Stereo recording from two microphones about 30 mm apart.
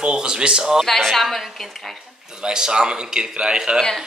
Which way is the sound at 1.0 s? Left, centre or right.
Centre.